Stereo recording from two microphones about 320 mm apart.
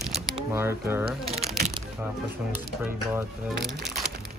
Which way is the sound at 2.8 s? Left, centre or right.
Centre.